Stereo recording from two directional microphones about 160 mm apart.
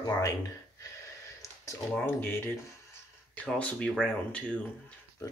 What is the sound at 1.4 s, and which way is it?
Speech, 20° left (ahead or behind).